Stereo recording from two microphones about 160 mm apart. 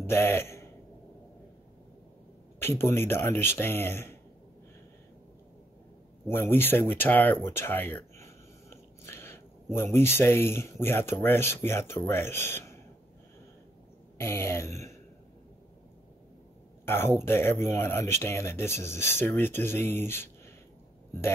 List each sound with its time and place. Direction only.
0.0 s a man's voice: 15° left (ahead or behind)
2.6 s speech: 15° left (ahead or behind)
6.2 s speech: 15° left (ahead or behind)
14.1 s speech: 15° left (ahead or behind)
16.8 s speech: 15° left (ahead or behind)